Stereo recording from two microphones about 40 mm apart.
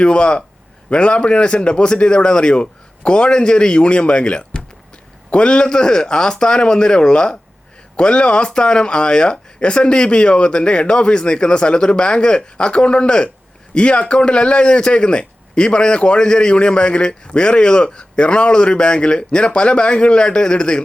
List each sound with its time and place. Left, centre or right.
0.0 s a man's voice: left